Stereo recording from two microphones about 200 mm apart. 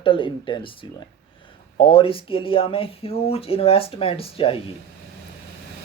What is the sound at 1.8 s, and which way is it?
Speech, 25° left (ahead or behind).